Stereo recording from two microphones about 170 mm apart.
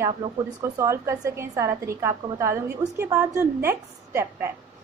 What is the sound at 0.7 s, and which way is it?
A woman's voice, 15° right (ahead or behind).